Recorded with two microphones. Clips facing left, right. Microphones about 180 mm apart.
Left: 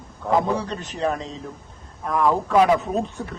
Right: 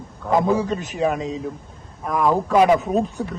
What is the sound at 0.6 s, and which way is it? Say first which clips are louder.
Speech: right 3 dB; centre (ahead or behind).